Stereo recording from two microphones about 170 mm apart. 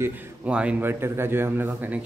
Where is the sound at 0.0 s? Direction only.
10° right (ahead or behind).